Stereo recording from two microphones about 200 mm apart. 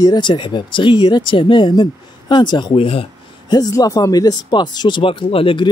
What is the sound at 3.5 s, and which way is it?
Speech, 20° left (ahead or behind).